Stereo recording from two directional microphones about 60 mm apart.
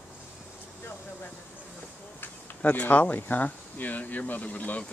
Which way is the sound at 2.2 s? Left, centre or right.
Left.